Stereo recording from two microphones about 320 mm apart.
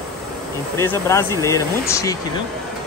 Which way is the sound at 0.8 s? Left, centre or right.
Centre.